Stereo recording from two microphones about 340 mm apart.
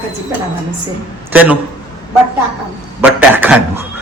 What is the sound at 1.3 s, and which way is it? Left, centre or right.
Speech, centre.